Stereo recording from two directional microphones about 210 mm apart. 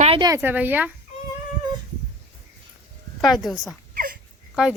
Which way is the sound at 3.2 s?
Centre (ahead or behind).